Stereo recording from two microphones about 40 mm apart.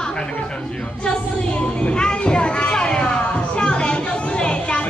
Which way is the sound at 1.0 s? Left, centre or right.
Left.